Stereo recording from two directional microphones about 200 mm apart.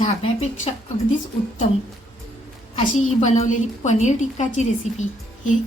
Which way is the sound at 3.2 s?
35° left (ahead or behind).